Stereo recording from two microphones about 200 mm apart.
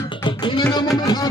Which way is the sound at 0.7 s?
20° left (ahead or behind).